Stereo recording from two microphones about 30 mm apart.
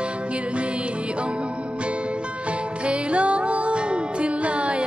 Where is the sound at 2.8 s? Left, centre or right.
Right.